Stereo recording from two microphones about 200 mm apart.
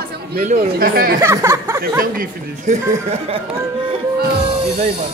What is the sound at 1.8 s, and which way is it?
Speech, 45° right (ahead or behind).